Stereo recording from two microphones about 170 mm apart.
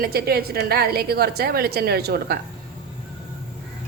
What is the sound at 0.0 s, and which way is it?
A woman's voice, 65° right (ahead or behind).